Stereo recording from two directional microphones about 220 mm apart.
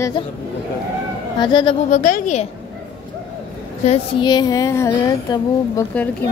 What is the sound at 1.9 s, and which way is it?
Speech, 35° left (ahead or behind).